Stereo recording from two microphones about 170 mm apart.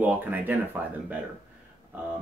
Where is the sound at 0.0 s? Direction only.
10° right (ahead or behind).